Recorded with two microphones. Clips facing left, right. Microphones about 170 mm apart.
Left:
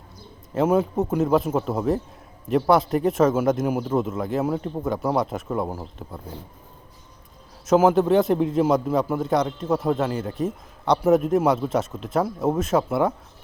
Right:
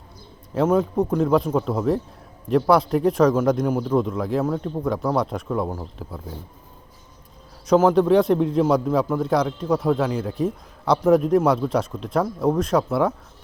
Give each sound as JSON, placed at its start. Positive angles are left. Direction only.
{"t": 0.5, "sound": "a man's voice", "side_deg": 5}
{"t": 7.7, "sound": "a man's voice", "side_deg": 5}